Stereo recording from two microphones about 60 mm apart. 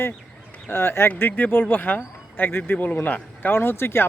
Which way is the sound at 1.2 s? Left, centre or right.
Left.